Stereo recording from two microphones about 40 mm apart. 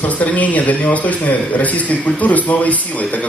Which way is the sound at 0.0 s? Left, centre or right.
Left.